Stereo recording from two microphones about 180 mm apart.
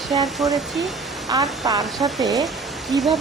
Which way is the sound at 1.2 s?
20° right (ahead or behind).